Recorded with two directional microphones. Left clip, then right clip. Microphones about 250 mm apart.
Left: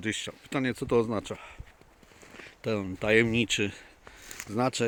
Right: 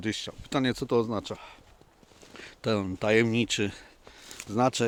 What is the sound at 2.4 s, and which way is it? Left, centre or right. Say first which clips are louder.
Speech: right 3 dB; centre.